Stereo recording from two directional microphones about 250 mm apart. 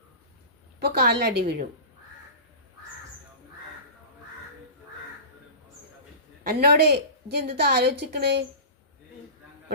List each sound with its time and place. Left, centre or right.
0.8 s a woman's voice: right
6.4 s a woman's voice: right